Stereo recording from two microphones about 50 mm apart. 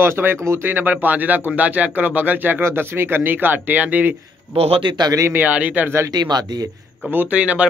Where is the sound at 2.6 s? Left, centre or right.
Right.